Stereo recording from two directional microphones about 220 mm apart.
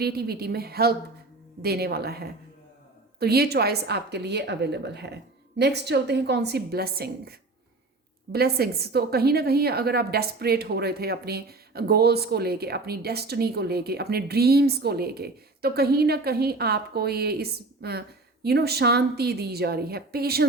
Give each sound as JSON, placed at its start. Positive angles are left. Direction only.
{"t": 0.0, "sound": "a woman's voice", "side_deg": -45}